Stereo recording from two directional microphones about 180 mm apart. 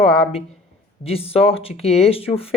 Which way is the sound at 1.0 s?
35° left (ahead or behind).